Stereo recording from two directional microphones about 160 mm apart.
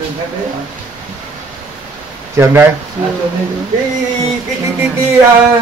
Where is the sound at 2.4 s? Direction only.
15° right (ahead or behind).